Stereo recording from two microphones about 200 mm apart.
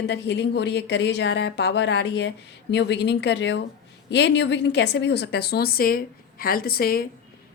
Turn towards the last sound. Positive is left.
turn(degrees=50)  # may be behind; listen again after turning